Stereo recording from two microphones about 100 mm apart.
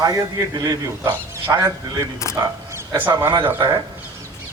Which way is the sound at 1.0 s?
25° right (ahead or behind).